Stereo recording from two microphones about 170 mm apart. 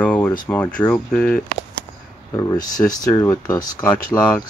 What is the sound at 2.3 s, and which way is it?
Speech, 20° left (ahead or behind).